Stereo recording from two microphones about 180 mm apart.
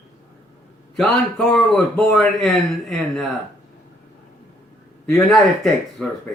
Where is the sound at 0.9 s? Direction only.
Centre (ahead or behind).